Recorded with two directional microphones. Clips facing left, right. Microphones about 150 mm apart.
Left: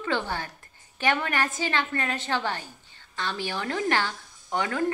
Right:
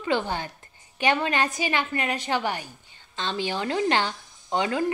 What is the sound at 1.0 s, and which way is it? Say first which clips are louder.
A woman's voice: right 2 dB; 20° right (ahead or behind).